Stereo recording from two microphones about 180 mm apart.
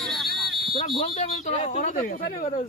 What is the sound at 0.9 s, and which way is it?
Speech, 40° left (ahead or behind).